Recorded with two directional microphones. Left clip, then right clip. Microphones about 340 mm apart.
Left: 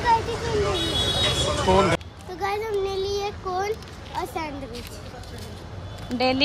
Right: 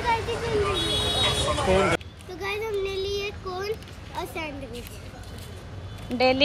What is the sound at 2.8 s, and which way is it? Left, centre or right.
Child singing, centre.